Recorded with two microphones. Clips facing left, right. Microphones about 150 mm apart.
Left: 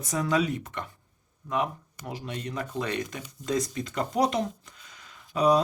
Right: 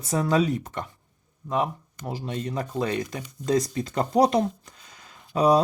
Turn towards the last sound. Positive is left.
turn(degrees=-40)  # may be behind; listen again after turning